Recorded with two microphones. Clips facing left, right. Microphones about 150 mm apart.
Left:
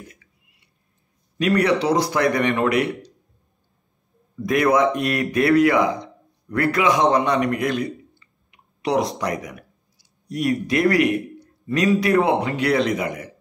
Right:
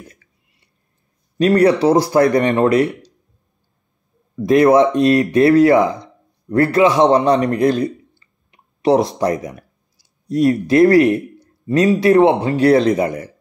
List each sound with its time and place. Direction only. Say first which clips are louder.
1.4 s speech: right 6 dB; 35° right (ahead or behind)
4.4 s a man's voice: right 7 dB; 30° right (ahead or behind)